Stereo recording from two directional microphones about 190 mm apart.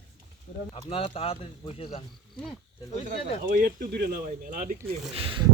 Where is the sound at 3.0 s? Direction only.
50° right (ahead or behind).